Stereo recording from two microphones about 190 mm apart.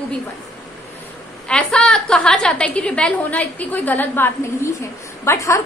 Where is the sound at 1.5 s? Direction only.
5° left (ahead or behind).